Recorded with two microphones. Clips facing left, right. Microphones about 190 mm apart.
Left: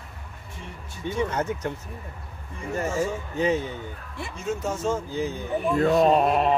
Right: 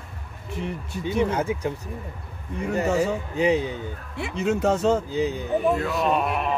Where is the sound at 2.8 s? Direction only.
65° right (ahead or behind).